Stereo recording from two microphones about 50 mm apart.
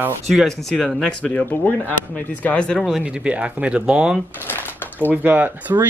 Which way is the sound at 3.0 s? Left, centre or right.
Right.